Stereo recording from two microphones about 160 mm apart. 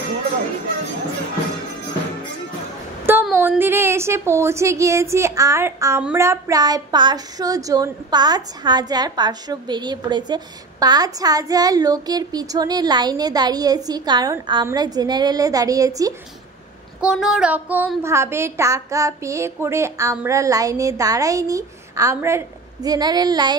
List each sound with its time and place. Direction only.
3.1 s a woman's voice: 10° right (ahead or behind)
17.0 s a woman's voice: 5° right (ahead or behind); by 23.6 s 25° right (ahead or behind)